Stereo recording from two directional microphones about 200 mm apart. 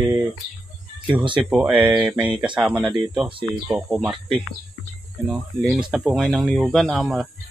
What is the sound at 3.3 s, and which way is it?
Speech, 25° right (ahead or behind).